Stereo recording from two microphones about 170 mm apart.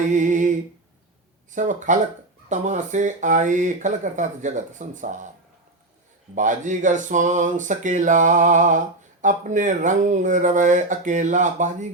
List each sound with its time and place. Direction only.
0.1 s speech: 45° right (ahead or behind)
6.3 s speech: 50° right (ahead or behind)